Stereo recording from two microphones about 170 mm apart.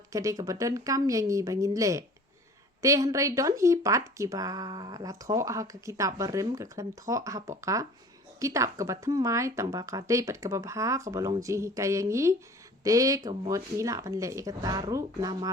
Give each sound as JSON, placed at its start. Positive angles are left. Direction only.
{"t": 0.1, "sound": "speech", "side_deg": -20}